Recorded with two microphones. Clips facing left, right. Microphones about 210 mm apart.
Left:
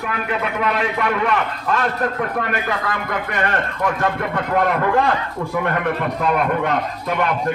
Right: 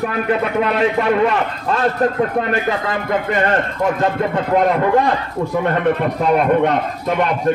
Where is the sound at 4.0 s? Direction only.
25° right (ahead or behind).